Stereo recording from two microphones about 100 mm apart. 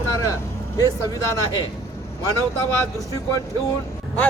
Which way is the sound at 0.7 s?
40° left (ahead or behind).